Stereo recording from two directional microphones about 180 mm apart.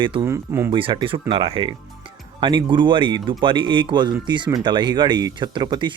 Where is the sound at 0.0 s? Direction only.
25° right (ahead or behind).